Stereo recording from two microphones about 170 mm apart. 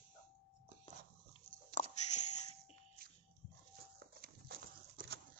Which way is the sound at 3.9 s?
65° right (ahead or behind).